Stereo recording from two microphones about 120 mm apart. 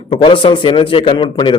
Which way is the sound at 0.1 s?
45° left (ahead or behind).